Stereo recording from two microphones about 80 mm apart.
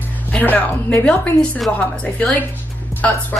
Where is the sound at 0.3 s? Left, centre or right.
Left.